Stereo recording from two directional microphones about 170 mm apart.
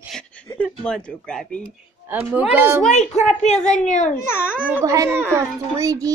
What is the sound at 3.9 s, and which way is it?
Speech, 45° left (ahead or behind).